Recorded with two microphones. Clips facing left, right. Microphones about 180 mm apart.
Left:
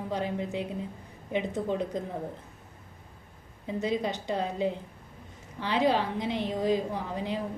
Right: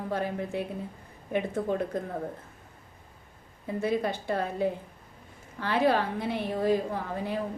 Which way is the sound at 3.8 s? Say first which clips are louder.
Right 2 dB; 15° left (ahead or behind).